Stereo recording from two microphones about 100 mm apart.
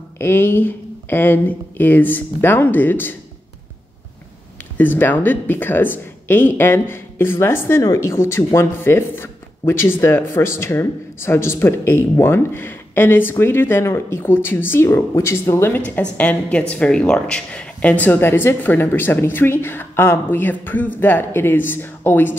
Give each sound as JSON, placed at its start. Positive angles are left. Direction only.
{"t": 0.2, "sound": "speech", "side_deg": 25}
{"t": 4.7, "sound": "speech", "side_deg": 20}
{"t": 15.8, "sound": "speech", "side_deg": 15}